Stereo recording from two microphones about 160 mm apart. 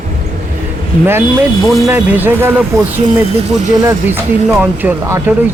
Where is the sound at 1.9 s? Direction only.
10° right (ahead or behind).